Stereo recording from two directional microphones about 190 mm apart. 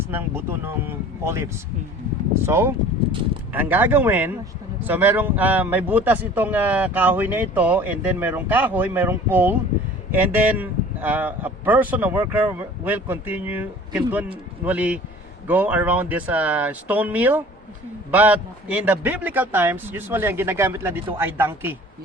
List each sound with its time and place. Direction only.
0.1 s speech: 10° right (ahead or behind)